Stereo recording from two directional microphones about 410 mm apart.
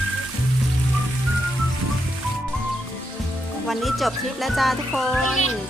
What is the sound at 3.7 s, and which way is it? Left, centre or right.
Speech, centre.